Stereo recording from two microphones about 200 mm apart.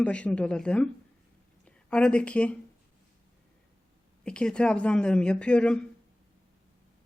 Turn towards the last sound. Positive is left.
turn(degrees=5)  # may be behind; listen again after turning